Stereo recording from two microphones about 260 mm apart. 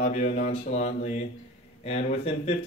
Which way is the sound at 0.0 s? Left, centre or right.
Left.